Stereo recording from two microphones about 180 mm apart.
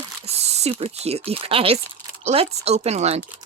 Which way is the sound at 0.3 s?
35° right (ahead or behind).